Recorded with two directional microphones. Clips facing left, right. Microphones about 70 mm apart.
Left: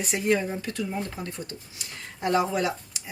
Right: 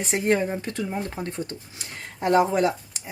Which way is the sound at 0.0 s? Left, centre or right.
Right.